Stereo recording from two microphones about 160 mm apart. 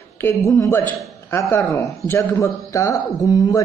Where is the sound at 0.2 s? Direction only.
15° left (ahead or behind).